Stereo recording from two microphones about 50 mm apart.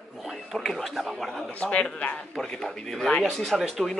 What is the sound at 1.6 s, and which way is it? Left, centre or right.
Speech, left.